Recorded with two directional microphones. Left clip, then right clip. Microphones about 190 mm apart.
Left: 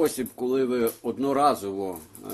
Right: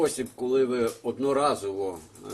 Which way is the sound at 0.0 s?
35° left (ahead or behind).